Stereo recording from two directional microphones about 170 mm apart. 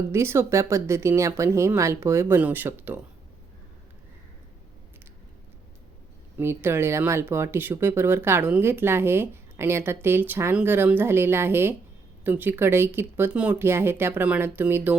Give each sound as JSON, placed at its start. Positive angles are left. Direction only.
{"t": 0.1, "sound": "speech", "side_deg": -15}
{"t": 6.3, "sound": "speech", "side_deg": -15}